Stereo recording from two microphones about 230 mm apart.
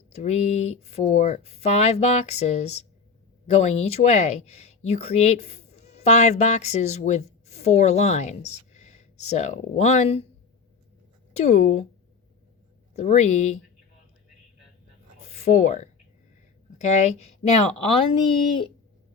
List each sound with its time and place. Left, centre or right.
0.1 s speech: left
11.3 s speech: left
12.9 s speech: left
15.4 s speech: left